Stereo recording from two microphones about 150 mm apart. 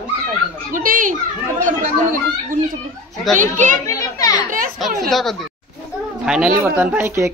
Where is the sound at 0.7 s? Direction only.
65° right (ahead or behind).